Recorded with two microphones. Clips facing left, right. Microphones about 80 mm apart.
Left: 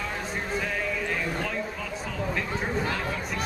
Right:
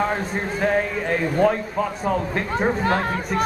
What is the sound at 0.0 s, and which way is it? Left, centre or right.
A man's voice, right.